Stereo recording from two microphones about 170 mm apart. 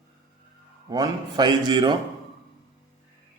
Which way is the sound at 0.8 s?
20° right (ahead or behind).